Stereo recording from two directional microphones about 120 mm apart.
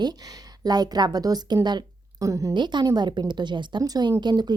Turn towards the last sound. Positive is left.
turn(degrees=-35)  # may be behind; listen again after turning